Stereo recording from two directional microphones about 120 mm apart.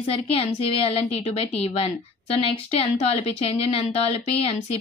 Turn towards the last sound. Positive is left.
turn(degrees=60)  # may be behind; listen again after turning